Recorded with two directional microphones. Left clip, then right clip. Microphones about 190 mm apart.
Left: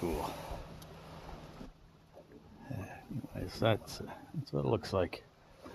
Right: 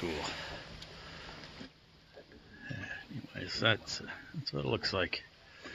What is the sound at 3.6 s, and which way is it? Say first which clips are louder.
Speech: right 1 dB; 10° left (ahead or behind).